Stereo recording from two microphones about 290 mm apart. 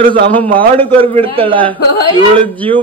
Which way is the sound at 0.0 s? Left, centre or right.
Right.